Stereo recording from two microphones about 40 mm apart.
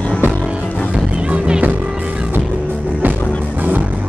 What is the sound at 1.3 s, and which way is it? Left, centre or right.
Music, right.